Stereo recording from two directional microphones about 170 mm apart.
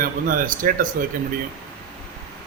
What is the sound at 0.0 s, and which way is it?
Speech, 55° right (ahead or behind).